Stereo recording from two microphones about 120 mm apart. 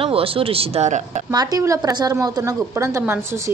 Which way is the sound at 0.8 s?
85° right.